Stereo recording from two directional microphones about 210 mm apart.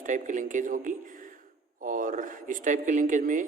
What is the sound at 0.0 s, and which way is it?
Speech, 35° right (ahead or behind).